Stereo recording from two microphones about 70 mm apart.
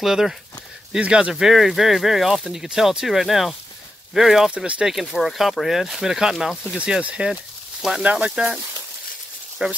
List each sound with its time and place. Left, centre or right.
0.0 s speech: centre
1.3 s speech: centre
4.9 s speech: centre
6.8 s speech: centre
9.6 s speech: centre